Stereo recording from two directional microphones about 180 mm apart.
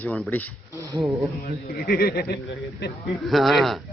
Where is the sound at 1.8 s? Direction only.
60° left (ahead or behind).